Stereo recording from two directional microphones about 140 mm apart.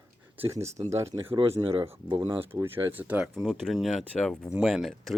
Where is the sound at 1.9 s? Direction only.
40° right (ahead or behind).